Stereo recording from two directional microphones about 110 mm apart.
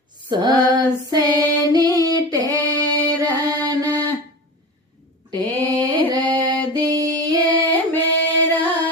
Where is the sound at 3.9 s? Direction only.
15° left (ahead or behind).